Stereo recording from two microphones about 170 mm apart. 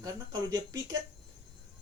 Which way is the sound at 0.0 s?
20° right (ahead or behind).